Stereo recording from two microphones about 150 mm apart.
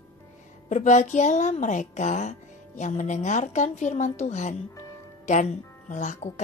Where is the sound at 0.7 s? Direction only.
50° left (ahead or behind).